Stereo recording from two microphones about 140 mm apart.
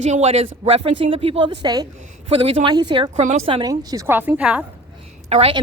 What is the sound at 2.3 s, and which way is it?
Speech, 40° right (ahead or behind).